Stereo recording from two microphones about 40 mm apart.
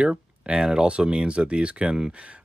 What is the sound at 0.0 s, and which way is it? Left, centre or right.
Speech, right.